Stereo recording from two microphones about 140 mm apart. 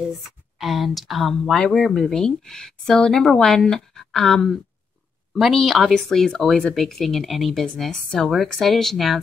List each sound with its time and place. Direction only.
0.6 s speech: centre (ahead or behind)